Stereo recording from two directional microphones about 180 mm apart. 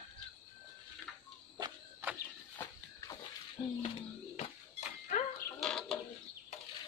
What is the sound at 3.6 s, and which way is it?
Music, 25° left (ahead or behind).